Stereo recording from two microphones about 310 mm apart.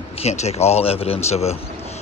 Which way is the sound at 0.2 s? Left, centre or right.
Left.